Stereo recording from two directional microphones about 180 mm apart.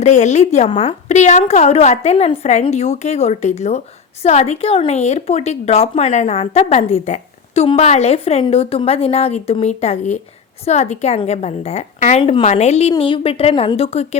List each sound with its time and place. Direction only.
0.0 s a woman's voice: 40° left (ahead or behind)